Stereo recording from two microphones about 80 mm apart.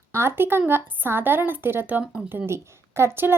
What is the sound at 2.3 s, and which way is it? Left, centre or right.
A woman's voice, right.